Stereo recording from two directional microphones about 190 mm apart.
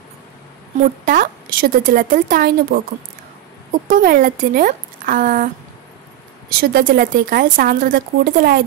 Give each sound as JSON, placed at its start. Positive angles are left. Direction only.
{"t": 1.0, "sound": "speech", "side_deg": -45}
{"t": 3.8, "sound": "speech", "side_deg": -45}
{"t": 6.5, "sound": "speech", "side_deg": -50}